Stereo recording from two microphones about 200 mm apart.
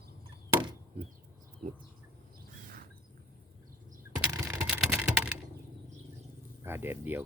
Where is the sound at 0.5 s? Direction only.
20° right (ahead or behind).